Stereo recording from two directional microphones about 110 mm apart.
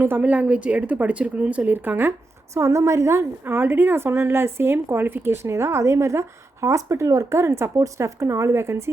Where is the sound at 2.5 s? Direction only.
30° right (ahead or behind).